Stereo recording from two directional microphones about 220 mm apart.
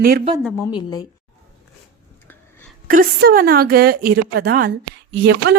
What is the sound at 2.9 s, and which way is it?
A woman's voice, 40° right (ahead or behind).